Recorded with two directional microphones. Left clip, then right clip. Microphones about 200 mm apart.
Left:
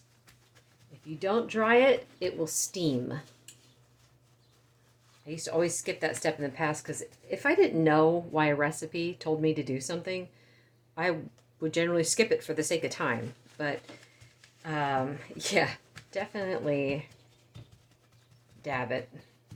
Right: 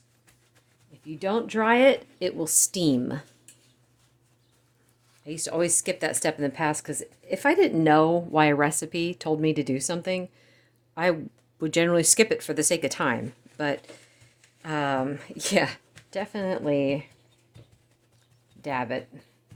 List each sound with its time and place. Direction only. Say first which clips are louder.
1.0 s a woman's voice: right 2 dB; 40° right (ahead or behind)
5.2 s a woman's voice: right 2 dB; 55° right (ahead or behind)
14.6 s a woman's voice: right 3 dB; 60° right (ahead or behind)
18.6 s a woman's voice: right 3 dB; 50° right (ahead or behind)